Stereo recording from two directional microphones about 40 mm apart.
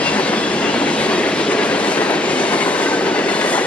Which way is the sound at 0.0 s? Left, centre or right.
Left.